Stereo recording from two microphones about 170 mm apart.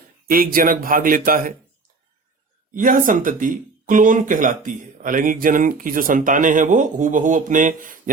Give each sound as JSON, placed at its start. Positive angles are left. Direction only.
{"t": 0.3, "sound": "speech", "side_deg": -55}
{"t": 2.7, "sound": "speech", "side_deg": -50}